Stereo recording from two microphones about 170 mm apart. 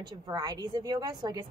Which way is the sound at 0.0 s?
25° right (ahead or behind).